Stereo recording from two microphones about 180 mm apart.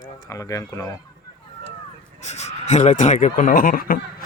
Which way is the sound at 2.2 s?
40° left (ahead or behind).